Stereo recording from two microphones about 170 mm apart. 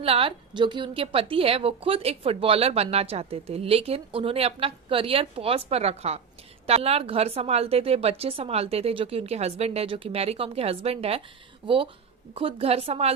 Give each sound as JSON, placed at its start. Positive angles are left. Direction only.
{"t": 0.0, "sound": "a woman's voice", "side_deg": -35}